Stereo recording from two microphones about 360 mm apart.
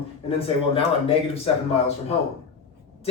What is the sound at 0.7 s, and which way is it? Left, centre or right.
Speech, centre.